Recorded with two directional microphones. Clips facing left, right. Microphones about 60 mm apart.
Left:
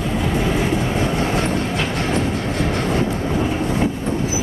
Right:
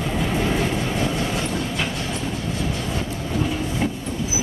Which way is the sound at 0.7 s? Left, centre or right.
Left.